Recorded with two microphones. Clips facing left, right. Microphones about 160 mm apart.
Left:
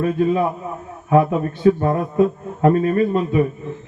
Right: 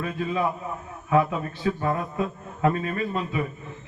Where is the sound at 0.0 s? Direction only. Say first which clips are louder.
Left 8 dB; 45° left (ahead or behind).